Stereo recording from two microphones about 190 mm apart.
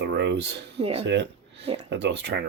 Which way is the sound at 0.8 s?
30° right (ahead or behind).